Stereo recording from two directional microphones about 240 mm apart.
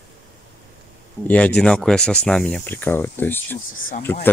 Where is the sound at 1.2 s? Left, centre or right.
Centre.